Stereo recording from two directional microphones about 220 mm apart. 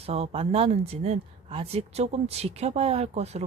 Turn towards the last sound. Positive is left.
turn(degrees=-30)  # may be behind; listen again after turning